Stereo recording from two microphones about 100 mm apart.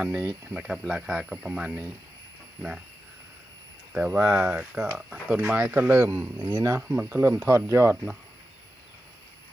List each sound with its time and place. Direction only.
0.0 s speech: 15° right (ahead or behind)
3.9 s speech: 10° right (ahead or behind)
4.2 s speech: 20° right (ahead or behind)
4.9 s speech: 5° right (ahead or behind); by 7.9 s 25° right (ahead or behind)